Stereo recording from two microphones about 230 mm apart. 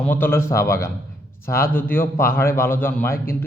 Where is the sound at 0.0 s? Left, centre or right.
Centre.